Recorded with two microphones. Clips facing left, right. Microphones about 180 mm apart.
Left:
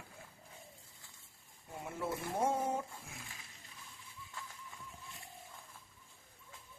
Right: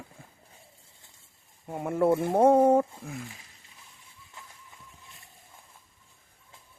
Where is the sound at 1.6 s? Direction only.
60° right (ahead or behind).